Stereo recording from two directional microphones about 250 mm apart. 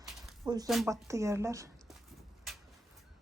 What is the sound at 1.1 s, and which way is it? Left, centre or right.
Speech, centre.